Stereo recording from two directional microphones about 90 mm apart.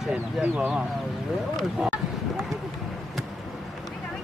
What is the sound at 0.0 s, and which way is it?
Speech, 15° right (ahead or behind).